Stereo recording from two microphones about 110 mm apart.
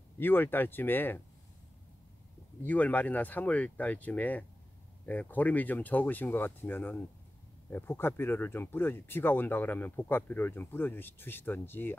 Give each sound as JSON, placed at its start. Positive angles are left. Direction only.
{"t": 0.2, "sound": "speech", "side_deg": 20}
{"t": 2.6, "sound": "speech", "side_deg": 15}